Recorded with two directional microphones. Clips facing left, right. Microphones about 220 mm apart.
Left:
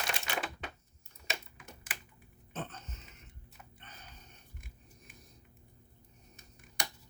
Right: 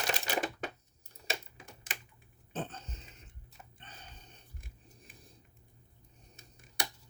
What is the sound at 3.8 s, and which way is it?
Snort, 30° right (ahead or behind).